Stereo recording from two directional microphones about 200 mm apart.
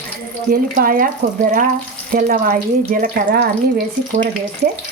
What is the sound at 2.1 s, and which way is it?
Speech, 45° right (ahead or behind).